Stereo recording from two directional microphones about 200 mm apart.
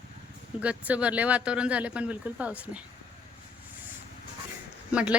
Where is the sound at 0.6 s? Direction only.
5° right (ahead or behind).